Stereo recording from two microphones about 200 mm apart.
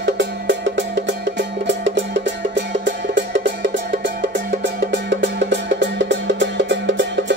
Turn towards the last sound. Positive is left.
turn(degrees=-65)  # may be behind; listen again after turning